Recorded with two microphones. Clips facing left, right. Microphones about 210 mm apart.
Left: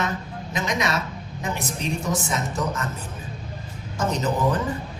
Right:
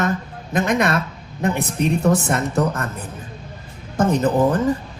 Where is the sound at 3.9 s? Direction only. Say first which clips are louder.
Right 7 dB; 55° right (ahead or behind).